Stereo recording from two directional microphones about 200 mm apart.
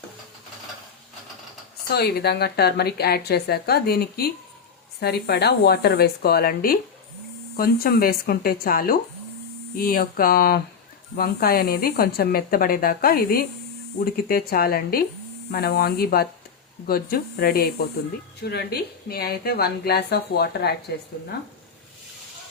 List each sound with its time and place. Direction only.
1.9 s a woman's voice: 55° left (ahead or behind)